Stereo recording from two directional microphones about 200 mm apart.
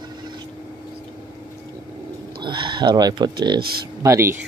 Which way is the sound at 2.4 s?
25° right (ahead or behind).